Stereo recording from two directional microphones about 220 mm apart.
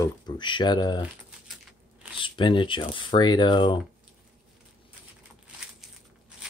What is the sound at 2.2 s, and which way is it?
Speech, 20° left (ahead or behind).